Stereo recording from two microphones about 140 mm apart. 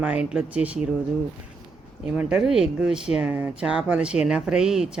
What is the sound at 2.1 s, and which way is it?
Speech, 5° right (ahead or behind).